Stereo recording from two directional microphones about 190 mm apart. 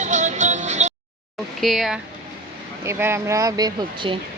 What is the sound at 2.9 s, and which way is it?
Speech, 10° right (ahead or behind).